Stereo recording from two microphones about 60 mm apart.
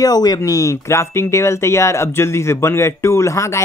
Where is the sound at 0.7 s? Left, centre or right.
Left.